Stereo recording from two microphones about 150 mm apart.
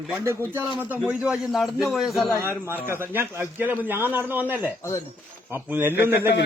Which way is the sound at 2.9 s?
15° right (ahead or behind).